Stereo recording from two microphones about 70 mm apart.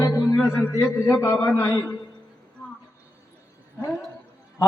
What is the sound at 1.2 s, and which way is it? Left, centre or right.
Speech, left.